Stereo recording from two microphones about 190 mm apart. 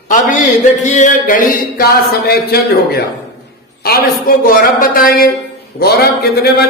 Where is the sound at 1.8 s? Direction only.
55° left (ahead or behind).